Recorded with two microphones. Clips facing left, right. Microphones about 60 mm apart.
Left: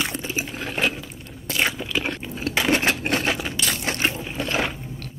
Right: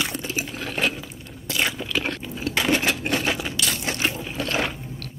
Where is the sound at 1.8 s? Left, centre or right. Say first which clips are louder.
Even; centre.